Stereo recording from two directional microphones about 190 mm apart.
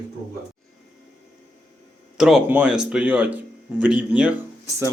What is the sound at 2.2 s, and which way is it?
Speech, 5° right (ahead or behind).